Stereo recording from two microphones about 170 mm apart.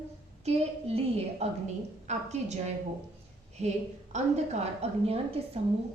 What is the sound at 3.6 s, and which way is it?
A woman's voice, 40° right (ahead or behind).